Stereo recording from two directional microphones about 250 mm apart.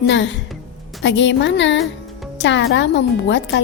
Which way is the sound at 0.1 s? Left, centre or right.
Left.